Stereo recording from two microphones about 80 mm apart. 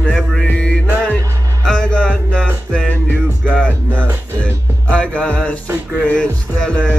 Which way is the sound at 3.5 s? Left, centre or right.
Centre.